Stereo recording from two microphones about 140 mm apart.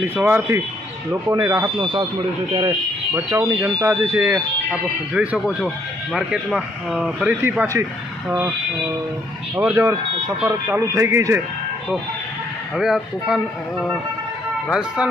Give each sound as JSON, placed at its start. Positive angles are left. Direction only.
{"t": 0.0, "sound": "speech", "side_deg": -15}
{"t": 3.3, "sound": "speech", "side_deg": -20}
{"t": 7.4, "sound": "speech", "side_deg": -20}
{"t": 9.7, "sound": "speech", "side_deg": -25}
{"t": 12.7, "sound": "speech", "side_deg": 0}